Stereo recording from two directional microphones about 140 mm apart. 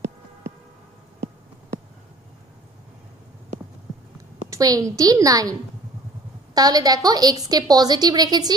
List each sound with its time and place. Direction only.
4.5 s a woman's voice: 25° right (ahead or behind)